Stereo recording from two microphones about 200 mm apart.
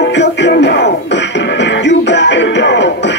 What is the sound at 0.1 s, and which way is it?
Music, 60° left (ahead or behind).